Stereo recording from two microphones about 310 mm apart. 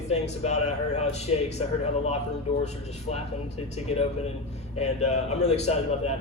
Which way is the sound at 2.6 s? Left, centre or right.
Left.